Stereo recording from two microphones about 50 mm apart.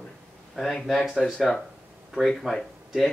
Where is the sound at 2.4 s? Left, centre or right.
Centre.